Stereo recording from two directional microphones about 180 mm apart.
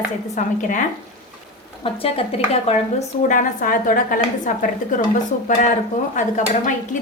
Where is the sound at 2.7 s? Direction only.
45° left (ahead or behind).